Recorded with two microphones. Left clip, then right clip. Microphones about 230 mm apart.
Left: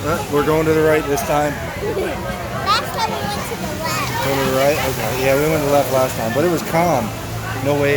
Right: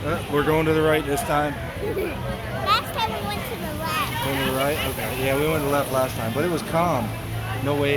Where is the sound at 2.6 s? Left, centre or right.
Centre.